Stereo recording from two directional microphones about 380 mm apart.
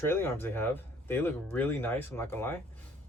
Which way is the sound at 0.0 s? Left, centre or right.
Centre.